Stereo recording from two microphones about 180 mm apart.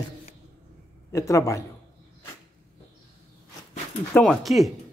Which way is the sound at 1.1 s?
15° left (ahead or behind).